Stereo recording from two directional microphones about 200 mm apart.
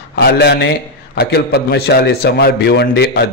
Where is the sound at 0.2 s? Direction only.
55° left (ahead or behind).